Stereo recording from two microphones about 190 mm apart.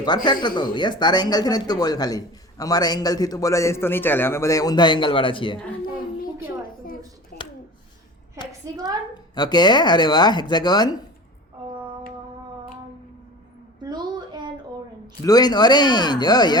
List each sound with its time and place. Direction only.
0.3 s speech: 25° left (ahead or behind)
7.3 s a sound: 50° left (ahead or behind)
8.7 s a woman's voice: 20° right (ahead or behind)
9.1 s speech: 20° left (ahead or behind)
13.8 s a sound: 20° right (ahead or behind)
15.0 s speech: 20° left (ahead or behind)